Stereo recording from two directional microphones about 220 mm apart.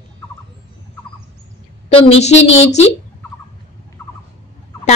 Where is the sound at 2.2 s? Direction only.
30° left (ahead or behind).